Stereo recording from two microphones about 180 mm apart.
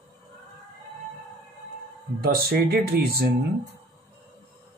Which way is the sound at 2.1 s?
60° right (ahead or behind).